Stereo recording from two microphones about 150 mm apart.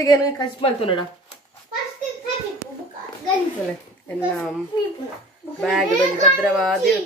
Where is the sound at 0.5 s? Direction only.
35° left (ahead or behind).